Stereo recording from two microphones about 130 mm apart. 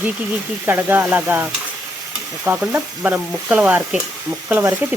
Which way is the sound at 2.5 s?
15° right (ahead or behind).